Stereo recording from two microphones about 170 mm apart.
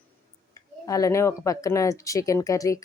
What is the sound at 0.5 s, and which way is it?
A woman's voice, 20° left (ahead or behind).